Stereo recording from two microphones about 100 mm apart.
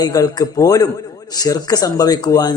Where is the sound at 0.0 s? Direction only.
40° left (ahead or behind).